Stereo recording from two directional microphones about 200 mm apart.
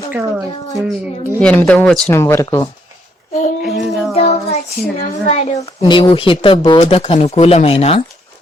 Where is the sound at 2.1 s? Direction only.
15° left (ahead or behind).